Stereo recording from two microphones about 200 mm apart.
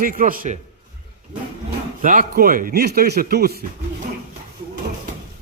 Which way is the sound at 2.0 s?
40° right (ahead or behind).